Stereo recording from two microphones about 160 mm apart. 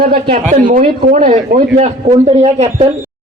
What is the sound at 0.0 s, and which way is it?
Speech, 65° right (ahead or behind).